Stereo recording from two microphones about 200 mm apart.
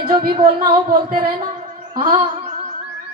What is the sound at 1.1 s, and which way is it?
Speech, 45° right (ahead or behind).